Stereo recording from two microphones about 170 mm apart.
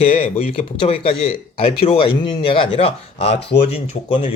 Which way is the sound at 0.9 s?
35° left (ahead or behind).